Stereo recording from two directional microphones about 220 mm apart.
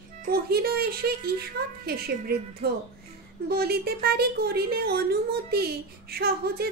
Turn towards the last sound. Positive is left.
turn(degrees=-45)  # may be behind; listen again after turning